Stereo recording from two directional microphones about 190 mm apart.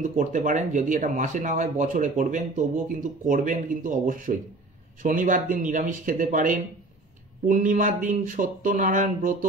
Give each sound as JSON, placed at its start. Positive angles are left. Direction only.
{"t": 0.0, "sound": "speech", "side_deg": -40}